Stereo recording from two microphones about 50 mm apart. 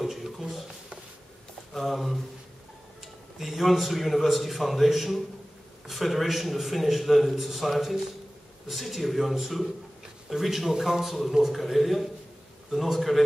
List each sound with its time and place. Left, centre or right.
0.0 s a sound: centre
1.7 s speech: centre
3.3 s a man's voice: centre